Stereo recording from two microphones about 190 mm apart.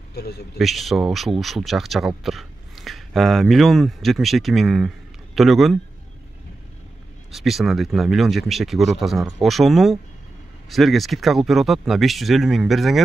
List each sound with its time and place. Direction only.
0.1 s a man's voice: 55° left (ahead or behind)
0.6 s speech: centre (ahead or behind)
7.2 s speech: centre (ahead or behind)